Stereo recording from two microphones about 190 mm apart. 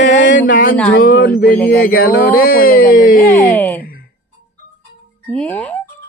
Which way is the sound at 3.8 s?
50° left (ahead or behind).